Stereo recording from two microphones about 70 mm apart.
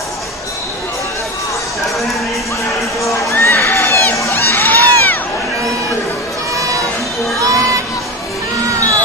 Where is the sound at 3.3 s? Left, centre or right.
Left.